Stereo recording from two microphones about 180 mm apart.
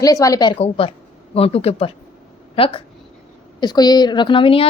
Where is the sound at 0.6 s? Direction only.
30° left (ahead or behind).